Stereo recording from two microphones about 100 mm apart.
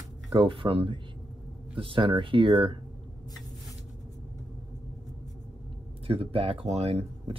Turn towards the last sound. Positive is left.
turn(degrees=-90)